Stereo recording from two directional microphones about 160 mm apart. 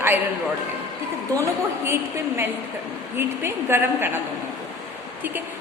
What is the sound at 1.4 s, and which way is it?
Speech, 15° right (ahead or behind).